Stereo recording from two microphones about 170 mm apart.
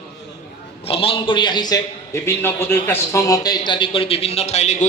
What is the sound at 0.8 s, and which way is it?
A man's voice, 35° left (ahead or behind).